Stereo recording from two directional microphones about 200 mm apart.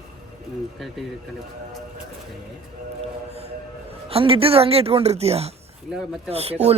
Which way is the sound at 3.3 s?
30° right (ahead or behind).